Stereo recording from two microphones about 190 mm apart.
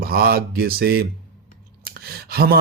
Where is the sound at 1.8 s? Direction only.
55° right (ahead or behind).